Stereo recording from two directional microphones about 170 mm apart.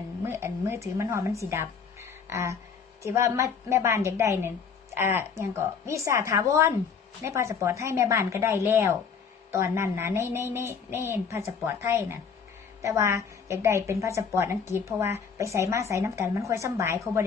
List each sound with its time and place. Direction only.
0.2 s music: 15° right (ahead or behind)
3.1 s a woman's voice: 15° right (ahead or behind)